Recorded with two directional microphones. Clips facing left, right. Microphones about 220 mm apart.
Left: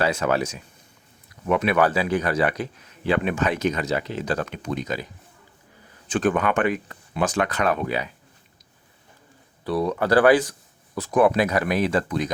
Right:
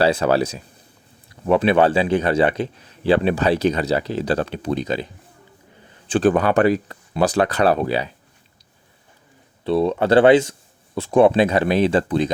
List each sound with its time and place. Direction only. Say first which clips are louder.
0.0 s a man's voice: right 5 dB; 35° right (ahead or behind)
9.6 s speech: right 5 dB; 25° right (ahead or behind)